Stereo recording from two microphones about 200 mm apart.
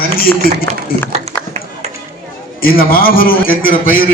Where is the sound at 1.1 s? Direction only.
30° right (ahead or behind).